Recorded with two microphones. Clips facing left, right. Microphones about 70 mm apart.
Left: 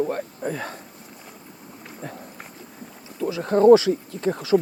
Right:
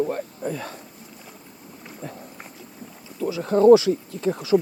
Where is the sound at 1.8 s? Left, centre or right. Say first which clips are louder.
Even; centre.